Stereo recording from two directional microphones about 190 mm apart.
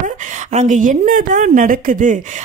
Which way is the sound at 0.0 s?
40° right (ahead or behind).